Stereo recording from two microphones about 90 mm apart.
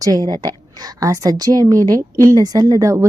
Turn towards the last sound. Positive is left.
turn(degrees=-35)  # may be behind; listen again after turning